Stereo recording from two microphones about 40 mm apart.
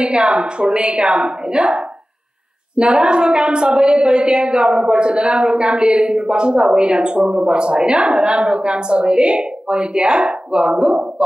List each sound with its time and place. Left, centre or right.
0.0 s speech: right